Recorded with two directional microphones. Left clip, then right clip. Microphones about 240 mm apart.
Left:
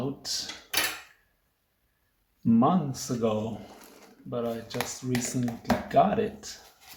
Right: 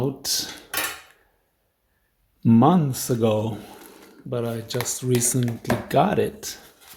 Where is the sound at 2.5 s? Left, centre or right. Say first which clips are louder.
Right 6 dB; right.